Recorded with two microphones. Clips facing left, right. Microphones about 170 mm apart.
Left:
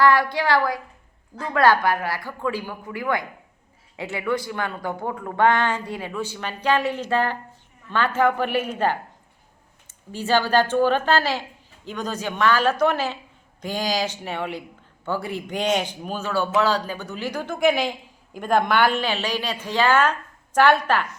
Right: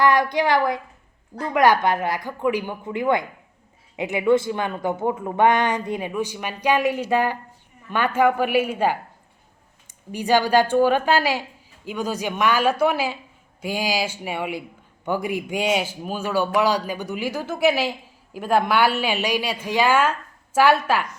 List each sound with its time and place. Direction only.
0.0 s speech: 20° right (ahead or behind)